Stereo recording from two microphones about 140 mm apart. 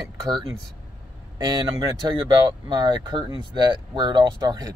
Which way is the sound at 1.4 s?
30° right (ahead or behind).